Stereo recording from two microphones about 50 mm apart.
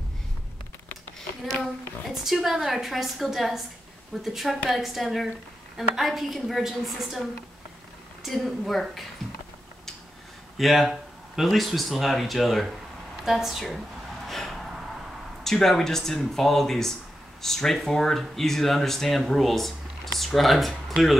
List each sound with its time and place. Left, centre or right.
2.0 s speech: centre
10.6 s a woman's voice: centre
14.2 s gasp: centre
15.4 s speech: centre